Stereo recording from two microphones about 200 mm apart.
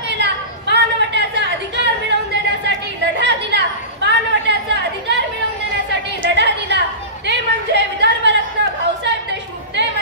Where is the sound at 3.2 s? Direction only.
60° right (ahead or behind).